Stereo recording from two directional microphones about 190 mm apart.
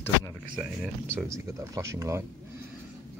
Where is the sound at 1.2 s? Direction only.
15° right (ahead or behind).